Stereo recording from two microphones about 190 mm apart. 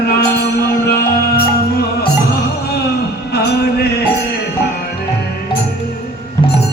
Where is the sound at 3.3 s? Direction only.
55° left (ahead or behind).